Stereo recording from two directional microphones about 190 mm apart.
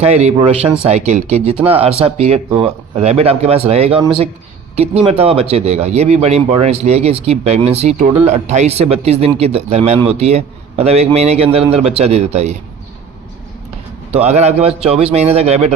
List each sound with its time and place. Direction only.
0.0 s speech: 35° right (ahead or behind)
5.0 s speech: 30° right (ahead or behind)
14.2 s speech: 35° right (ahead or behind)